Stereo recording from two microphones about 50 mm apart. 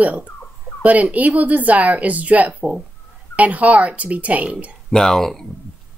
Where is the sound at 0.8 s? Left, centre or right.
Right.